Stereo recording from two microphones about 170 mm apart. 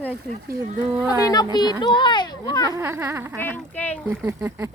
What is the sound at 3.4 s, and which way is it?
Speech, 10° left (ahead or behind).